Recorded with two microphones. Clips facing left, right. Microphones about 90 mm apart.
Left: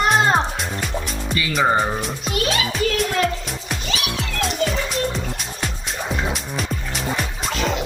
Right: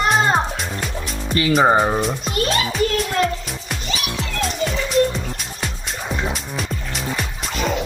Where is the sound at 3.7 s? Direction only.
Centre (ahead or behind).